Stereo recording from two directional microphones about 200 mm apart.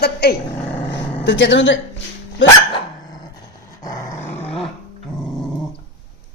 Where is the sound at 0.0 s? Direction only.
55° left (ahead or behind).